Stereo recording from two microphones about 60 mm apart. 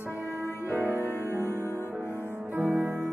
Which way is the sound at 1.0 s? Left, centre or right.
Left.